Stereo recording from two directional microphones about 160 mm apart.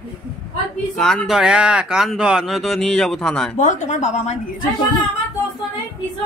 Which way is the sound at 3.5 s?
50° left (ahead or behind).